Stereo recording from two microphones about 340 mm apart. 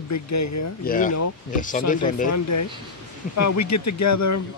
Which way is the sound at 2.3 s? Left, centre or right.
Left.